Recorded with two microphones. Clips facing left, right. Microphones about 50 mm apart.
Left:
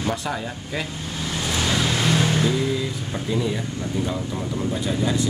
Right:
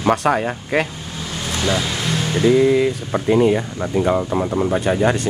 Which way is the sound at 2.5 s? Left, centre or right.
Right.